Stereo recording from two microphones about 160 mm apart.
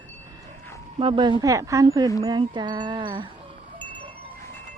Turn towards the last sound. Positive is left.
turn(degrees=-25)  # may be behind; listen again after turning